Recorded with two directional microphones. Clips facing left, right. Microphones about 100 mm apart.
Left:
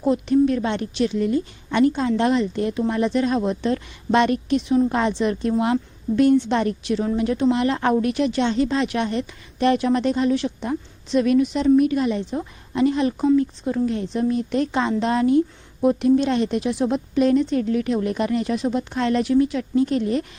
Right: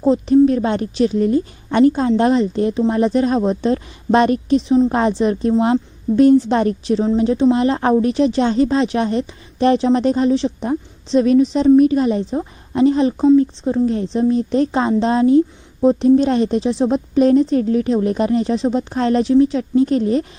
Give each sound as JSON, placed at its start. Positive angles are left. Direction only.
{"t": 0.0, "sound": "a woman's voice", "side_deg": -35}